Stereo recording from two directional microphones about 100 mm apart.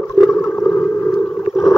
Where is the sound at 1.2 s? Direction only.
15° left (ahead or behind).